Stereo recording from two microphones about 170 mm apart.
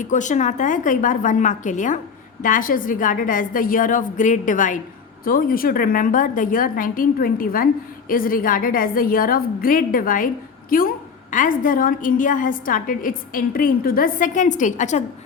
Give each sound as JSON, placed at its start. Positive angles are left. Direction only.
{"t": 0.0, "sound": "a woman's voice", "side_deg": 45}